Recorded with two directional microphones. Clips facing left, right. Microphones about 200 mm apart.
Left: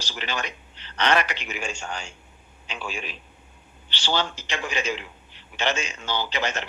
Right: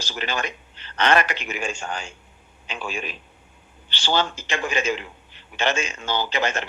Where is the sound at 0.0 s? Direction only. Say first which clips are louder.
Right 3 dB; 50° right (ahead or behind).